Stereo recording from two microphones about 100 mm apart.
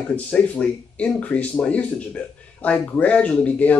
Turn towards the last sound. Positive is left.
turn(degrees=15)  # may be behind; listen again after turning